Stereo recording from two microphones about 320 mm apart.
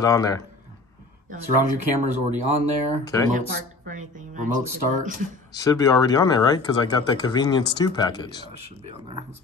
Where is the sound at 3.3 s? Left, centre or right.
Right.